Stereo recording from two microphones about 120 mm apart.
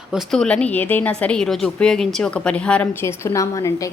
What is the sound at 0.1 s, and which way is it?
Speech, centre (ahead or behind).